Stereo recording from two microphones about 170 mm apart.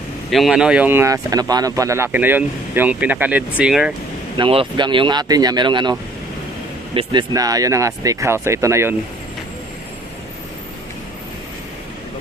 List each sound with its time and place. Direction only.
0.3 s speech: centre (ahead or behind)
4.4 s speech: 30° right (ahead or behind)